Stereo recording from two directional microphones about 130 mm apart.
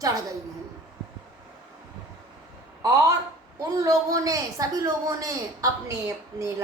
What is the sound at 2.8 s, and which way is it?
Speech, 25° right (ahead or behind).